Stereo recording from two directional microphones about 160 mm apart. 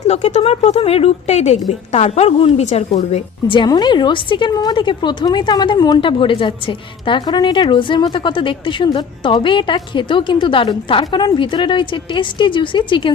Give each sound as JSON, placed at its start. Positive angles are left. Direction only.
{"t": 0.0, "sound": "a woman's voice", "side_deg": 45}
{"t": 3.5, "sound": "a woman's voice", "side_deg": 30}